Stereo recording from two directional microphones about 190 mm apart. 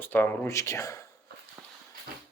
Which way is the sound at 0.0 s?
10° left (ahead or behind).